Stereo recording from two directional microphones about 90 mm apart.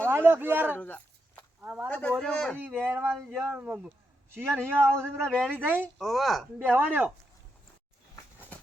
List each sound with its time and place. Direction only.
0.1 s speech: 25° right (ahead or behind)
0.8 s a sound: 15° left (ahead or behind)
1.6 s speech: 20° right (ahead or behind)
1.9 s a man's voice: 15° left (ahead or behind)
2.6 s speech: 20° right (ahead or behind)
5.1 s a man's voice: 5° left (ahead or behind)
5.5 s speech: 20° right (ahead or behind)
6.0 s a woman's voice: 5° left (ahead or behind)
6.6 s speech: 20° right (ahead or behind)